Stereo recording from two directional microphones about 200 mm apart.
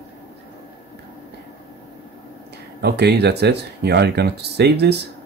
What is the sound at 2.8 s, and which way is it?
Speech, 55° right (ahead or behind).